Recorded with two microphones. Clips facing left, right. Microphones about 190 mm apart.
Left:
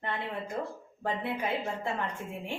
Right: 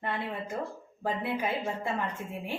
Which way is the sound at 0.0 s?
5° right (ahead or behind).